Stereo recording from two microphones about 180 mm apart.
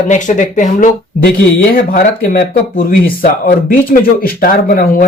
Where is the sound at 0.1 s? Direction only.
45° left (ahead or behind).